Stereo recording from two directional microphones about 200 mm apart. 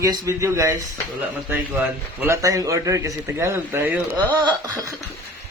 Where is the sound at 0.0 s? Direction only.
15° right (ahead or behind).